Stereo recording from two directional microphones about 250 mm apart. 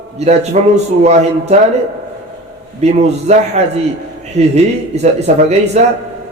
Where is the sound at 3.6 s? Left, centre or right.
Right.